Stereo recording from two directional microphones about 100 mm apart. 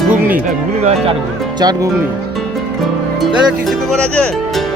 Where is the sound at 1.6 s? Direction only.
40° right (ahead or behind).